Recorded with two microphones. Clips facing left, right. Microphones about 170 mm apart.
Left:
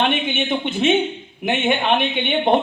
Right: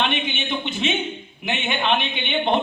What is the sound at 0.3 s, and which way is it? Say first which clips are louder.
A man's voice: left 5 dB; 50° left (ahead or behind).